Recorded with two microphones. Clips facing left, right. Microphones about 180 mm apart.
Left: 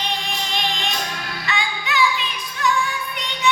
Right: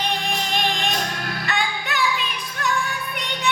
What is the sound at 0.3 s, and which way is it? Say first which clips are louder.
Music: right 2 dB; 50° right (ahead or behind).